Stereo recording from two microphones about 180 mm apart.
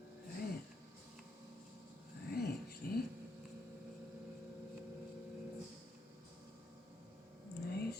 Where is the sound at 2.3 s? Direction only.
60° left (ahead or behind).